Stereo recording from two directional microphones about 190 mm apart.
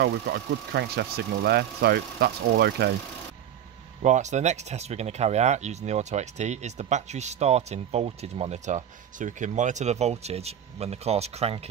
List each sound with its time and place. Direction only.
0.0 s speech: 60° right (ahead or behind)
4.0 s speech: 40° right (ahead or behind)